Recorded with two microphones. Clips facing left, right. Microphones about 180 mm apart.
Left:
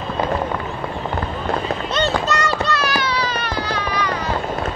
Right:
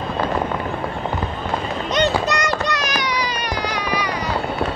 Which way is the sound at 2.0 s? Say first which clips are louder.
Right 2 dB; 15° right (ahead or behind).